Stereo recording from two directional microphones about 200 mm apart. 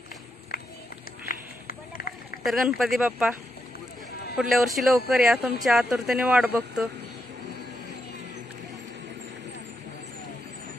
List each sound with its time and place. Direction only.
1.3 s run: 45° left (ahead or behind)
2.4 s speech: centre (ahead or behind)
4.4 s speech: centre (ahead or behind)